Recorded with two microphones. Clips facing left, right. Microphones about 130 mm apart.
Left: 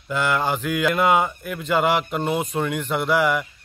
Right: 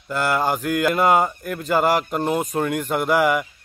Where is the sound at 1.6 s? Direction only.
40° right (ahead or behind).